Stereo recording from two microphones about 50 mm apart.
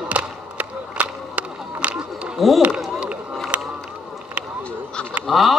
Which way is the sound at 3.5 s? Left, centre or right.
Right.